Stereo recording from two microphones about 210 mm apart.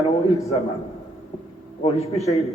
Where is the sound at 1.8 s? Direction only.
30° left (ahead or behind).